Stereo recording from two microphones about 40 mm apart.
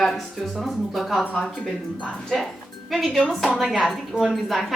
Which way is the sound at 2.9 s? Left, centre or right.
Centre.